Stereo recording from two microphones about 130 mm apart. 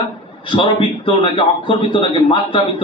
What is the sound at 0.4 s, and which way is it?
A man's voice, 40° left (ahead or behind).